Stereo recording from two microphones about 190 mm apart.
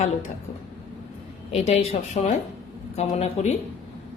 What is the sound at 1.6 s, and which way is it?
Speech, 35° left (ahead or behind).